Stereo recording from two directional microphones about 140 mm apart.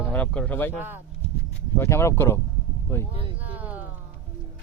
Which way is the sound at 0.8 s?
15° right (ahead or behind).